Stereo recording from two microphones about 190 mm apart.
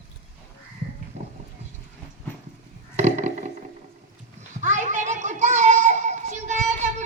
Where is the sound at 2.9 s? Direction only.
40° right (ahead or behind).